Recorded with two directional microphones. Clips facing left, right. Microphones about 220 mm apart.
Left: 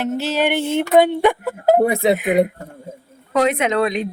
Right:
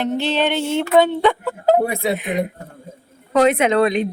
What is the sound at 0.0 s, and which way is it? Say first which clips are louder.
Music: even; 5° left (ahead or behind).